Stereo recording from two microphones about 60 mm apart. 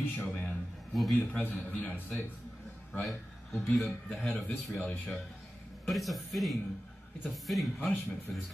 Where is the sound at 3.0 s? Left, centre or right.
Centre.